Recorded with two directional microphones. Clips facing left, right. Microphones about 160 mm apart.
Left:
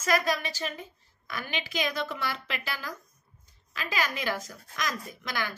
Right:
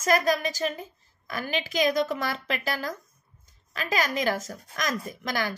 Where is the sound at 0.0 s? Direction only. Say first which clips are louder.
Right 4 dB; 40° right (ahead or behind).